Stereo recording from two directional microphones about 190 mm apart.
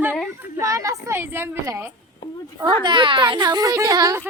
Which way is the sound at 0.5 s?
15° right (ahead or behind).